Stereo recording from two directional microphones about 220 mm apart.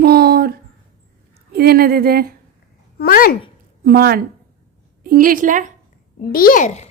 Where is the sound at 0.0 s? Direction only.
45° right (ahead or behind).